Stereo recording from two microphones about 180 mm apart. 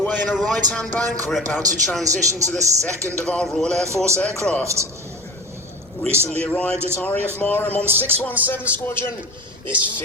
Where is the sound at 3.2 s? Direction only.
Centre (ahead or behind).